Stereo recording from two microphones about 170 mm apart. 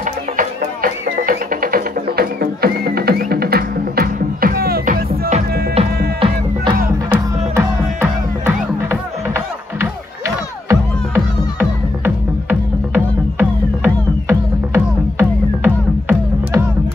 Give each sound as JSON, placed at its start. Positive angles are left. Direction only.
{"t": 0.0, "sound": "music", "side_deg": -55}
{"t": 5.8, "sound": "music", "side_deg": -35}
{"t": 7.1, "sound": "music", "side_deg": -15}